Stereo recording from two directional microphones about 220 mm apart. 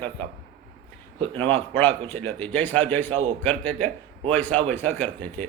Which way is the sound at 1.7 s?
10° left (ahead or behind).